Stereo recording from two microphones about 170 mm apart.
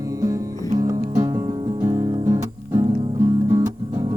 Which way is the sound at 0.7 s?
20° right (ahead or behind).